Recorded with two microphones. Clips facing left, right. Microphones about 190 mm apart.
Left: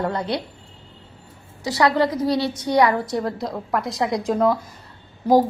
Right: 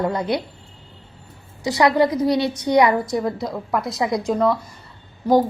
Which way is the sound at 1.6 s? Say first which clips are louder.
Right 2 dB; 15° right (ahead or behind).